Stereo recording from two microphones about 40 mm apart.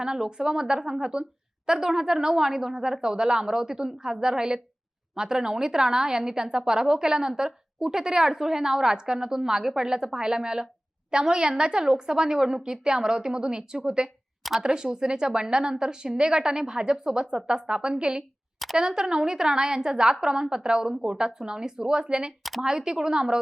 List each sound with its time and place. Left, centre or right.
0.0 s a woman's voice: centre